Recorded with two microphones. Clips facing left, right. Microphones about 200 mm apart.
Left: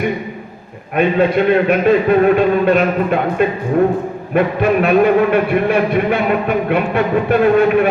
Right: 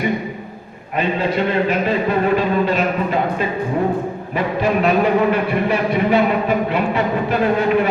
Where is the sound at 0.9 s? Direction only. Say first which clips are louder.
Left 6 dB; 60° left (ahead or behind).